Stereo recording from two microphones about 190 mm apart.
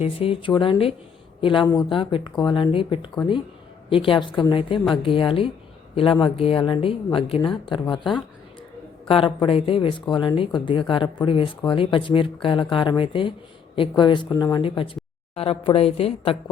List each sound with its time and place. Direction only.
0.0 s speech: 30° left (ahead or behind)
9.0 s a woman's voice: 30° left (ahead or behind)